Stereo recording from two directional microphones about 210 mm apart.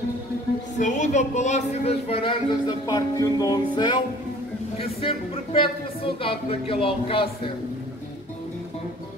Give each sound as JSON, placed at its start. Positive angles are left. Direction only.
{"t": 0.7, "sound": "speech", "side_deg": 35}